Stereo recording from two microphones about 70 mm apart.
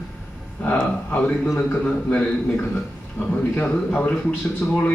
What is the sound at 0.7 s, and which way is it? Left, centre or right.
A man's voice, left.